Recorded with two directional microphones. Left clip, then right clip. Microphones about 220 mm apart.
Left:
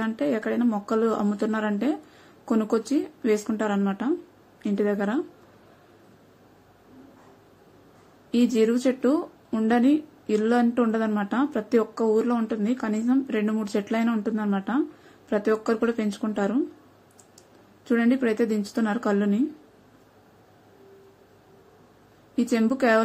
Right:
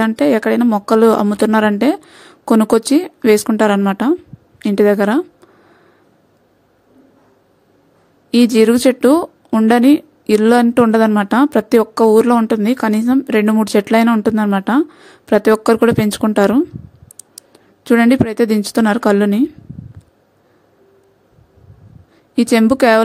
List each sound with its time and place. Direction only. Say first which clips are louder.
0.0 s speech: right 13 dB; 50° right (ahead or behind)
8.3 s speech: right 11 dB; 50° right (ahead or behind)
17.8 s speech: right 11 dB; 50° right (ahead or behind)
22.3 s speech: right 12 dB; 50° right (ahead or behind)